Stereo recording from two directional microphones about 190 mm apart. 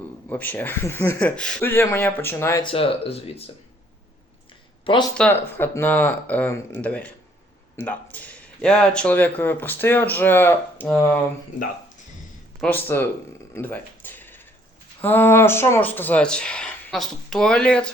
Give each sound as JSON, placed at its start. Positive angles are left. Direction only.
{"t": 0.3, "sound": "speech", "side_deg": 10}
{"t": 2.7, "sound": "speech", "side_deg": 30}
{"t": 5.1, "sound": "speech", "side_deg": 10}
{"t": 12.5, "sound": "speech", "side_deg": 10}
{"t": 13.5, "sound": "a sound", "side_deg": 10}
{"t": 15.0, "sound": "speech", "side_deg": 10}